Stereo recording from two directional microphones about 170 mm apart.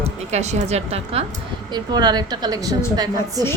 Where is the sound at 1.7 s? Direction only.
25° right (ahead or behind).